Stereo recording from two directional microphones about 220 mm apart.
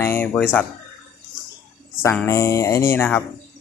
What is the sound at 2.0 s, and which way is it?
Speech, 10° left (ahead or behind).